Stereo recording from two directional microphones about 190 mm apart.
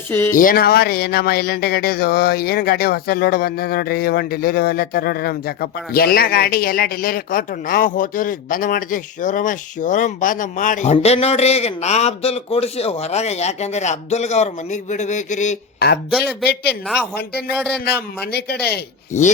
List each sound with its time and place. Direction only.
0.1 s speech: 10° left (ahead or behind)
0.3 s a man's voice: 50° left (ahead or behind)
15.8 s a man's voice: 55° left (ahead or behind)
17.2 s a man's voice: 55° left (ahead or behind)
19.1 s a man's voice: 40° left (ahead or behind)